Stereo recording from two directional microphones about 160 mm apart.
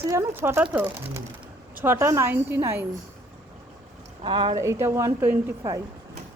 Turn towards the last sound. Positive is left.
turn(degrees=-15)  # may be behind; listen again after turning